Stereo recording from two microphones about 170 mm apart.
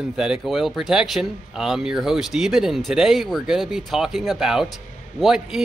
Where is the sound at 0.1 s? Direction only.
Centre (ahead or behind).